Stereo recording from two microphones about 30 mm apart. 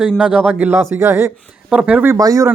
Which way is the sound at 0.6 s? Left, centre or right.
Right.